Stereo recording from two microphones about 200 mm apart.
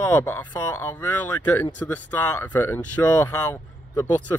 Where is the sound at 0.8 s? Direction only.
10° left (ahead or behind).